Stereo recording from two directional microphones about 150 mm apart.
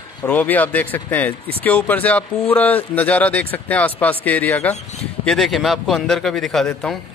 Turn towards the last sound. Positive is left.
turn(degrees=5)  # may be behind; listen again after turning